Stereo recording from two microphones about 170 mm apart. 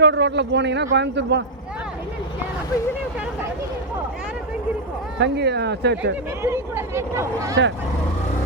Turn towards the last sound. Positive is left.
turn(degrees=-15)  # may be behind; listen again after turning